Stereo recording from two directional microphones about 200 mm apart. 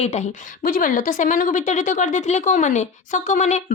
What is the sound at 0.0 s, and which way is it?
A woman's voice, 35° left (ahead or behind).